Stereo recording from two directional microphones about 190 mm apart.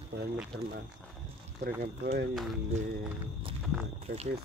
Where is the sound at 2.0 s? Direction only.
55° right (ahead or behind).